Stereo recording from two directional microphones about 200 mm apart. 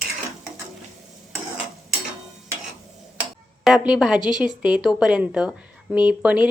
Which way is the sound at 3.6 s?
Centre (ahead or behind).